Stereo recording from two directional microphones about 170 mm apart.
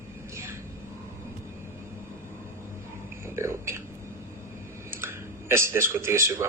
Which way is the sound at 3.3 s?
15° right (ahead or behind).